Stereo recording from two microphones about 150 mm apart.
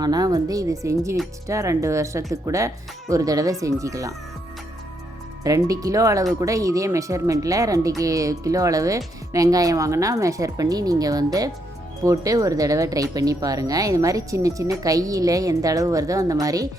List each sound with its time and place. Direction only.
0.0 s speech: 25° right (ahead or behind)
5.4 s speech: 20° right (ahead or behind)